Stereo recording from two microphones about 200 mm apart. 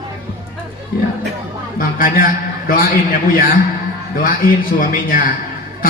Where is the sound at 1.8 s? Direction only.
45° left (ahead or behind).